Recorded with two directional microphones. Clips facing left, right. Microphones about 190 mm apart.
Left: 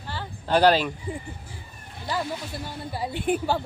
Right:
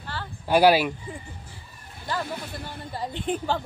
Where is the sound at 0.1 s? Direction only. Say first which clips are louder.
Even; 15° left (ahead or behind).